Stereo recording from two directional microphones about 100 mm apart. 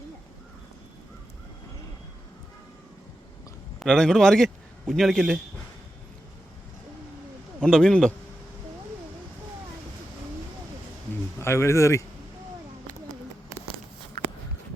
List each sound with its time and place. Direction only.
3.8 s a man's voice: 5° left (ahead or behind)
7.6 s speech: 5° left (ahead or behind)
11.3 s speech: 25° left (ahead or behind)